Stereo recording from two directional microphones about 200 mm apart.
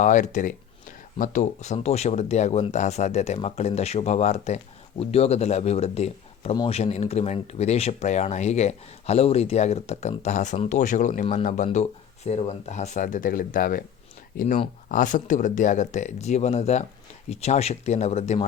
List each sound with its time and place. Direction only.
0.0 s speech: 40° left (ahead or behind)